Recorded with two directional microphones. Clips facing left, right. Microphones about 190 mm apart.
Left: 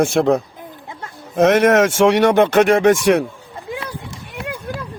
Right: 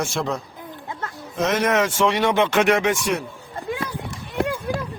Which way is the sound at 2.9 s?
65° left (ahead or behind).